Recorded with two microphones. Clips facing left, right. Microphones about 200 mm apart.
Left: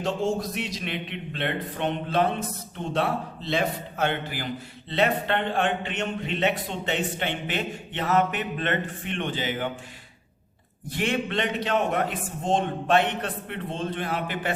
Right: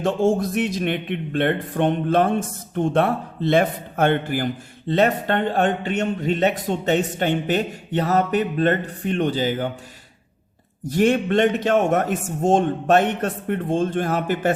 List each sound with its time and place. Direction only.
0.0 s a man's voice: 50° right (ahead or behind)
10.8 s a man's voice: 45° right (ahead or behind)